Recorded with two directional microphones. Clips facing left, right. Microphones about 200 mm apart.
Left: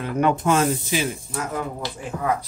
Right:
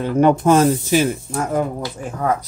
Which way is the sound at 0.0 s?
30° right (ahead or behind).